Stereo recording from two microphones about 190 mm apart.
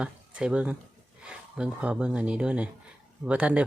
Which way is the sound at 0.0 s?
5° right (ahead or behind).